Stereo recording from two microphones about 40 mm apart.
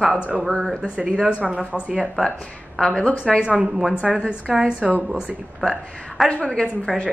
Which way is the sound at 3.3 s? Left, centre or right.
Right.